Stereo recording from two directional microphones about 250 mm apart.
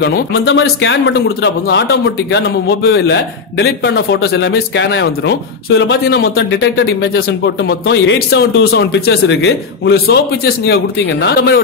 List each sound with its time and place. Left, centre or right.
0.0 s a man's voice: left